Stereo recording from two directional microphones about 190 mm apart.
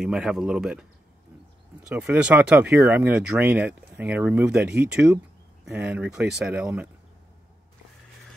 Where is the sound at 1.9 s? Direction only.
5° right (ahead or behind).